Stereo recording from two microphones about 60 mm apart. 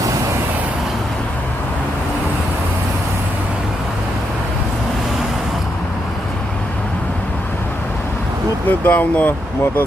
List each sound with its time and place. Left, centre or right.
8.8 s speech: left